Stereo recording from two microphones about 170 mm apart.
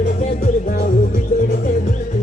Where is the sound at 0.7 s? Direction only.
55° left (ahead or behind).